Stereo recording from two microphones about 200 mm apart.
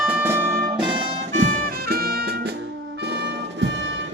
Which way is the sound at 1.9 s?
50° right (ahead or behind).